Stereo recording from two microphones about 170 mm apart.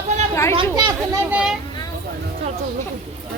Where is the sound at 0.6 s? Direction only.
25° right (ahead or behind).